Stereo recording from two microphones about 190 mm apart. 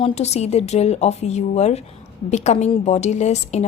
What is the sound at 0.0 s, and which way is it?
A woman's voice, 35° left (ahead or behind).